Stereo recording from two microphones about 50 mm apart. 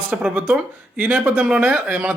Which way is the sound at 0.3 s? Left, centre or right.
Right.